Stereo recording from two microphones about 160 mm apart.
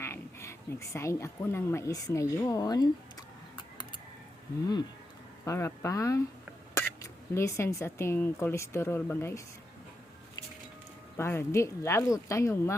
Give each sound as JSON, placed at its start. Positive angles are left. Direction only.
{"t": 0.0, "sound": "speech", "side_deg": 15}
{"t": 5.5, "sound": "speech", "side_deg": 20}
{"t": 11.2, "sound": "speech", "side_deg": 15}